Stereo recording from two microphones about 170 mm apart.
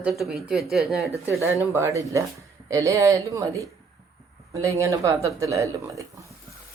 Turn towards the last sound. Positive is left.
turn(degrees=-20)  # may be behind; listen again after turning